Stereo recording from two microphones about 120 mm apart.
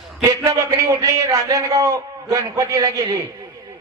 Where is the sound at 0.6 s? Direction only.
30° right (ahead or behind).